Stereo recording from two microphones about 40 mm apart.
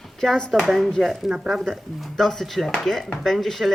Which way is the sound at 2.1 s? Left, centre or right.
Centre.